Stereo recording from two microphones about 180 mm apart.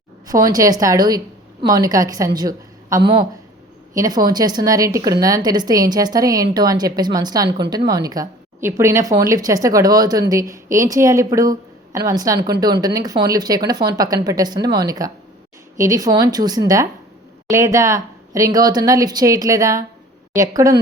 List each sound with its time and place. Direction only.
0.3 s a woman's voice: 20° right (ahead or behind)